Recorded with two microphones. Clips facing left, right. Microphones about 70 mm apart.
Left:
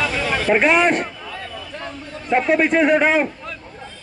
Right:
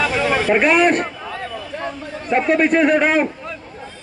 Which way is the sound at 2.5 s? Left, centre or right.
Left.